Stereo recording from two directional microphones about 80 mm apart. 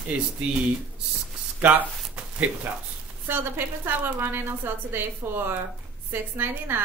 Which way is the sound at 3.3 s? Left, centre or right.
Right.